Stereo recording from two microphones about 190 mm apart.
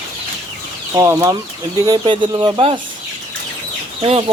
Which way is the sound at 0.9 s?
15° right (ahead or behind).